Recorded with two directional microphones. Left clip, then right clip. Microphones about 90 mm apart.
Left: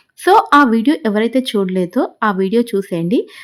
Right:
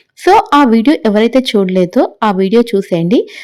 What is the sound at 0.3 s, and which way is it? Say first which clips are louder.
A woman's voice: right 2 dB; 35° right (ahead or behind).